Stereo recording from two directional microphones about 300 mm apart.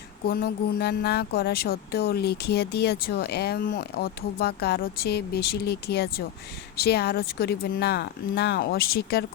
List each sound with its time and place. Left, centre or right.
0.3 s speech: left